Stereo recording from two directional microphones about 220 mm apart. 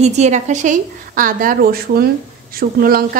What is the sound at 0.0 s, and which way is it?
A woman's voice, 30° right (ahead or behind).